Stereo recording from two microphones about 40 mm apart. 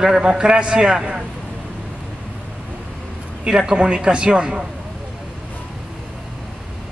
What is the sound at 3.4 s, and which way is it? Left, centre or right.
A man's voice, right.